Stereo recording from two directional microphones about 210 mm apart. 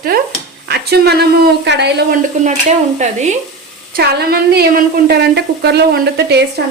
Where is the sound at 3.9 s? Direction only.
50° right (ahead or behind).